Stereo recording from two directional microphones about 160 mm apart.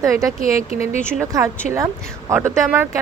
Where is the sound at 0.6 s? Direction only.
40° left (ahead or behind).